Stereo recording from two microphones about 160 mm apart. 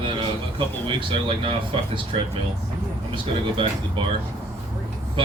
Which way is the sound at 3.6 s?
30° right (ahead or behind).